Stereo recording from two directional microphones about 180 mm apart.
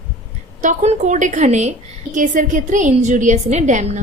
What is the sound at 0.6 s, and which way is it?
A woman's voice, 40° right (ahead or behind).